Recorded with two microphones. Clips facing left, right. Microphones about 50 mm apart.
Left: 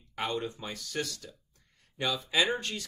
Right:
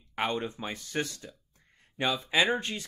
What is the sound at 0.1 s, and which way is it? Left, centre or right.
Speech, right.